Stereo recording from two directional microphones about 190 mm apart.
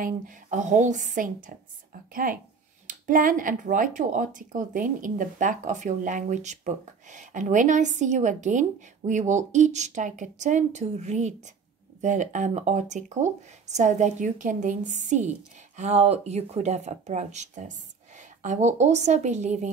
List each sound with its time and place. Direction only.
0.0 s speech: 40° right (ahead or behind)